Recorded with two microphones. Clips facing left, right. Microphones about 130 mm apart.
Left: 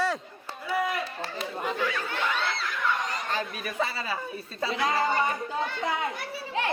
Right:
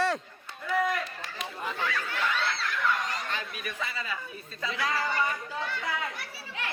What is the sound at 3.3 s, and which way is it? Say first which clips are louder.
A woman's voice: left 4 dB; 35° left (ahead or behind).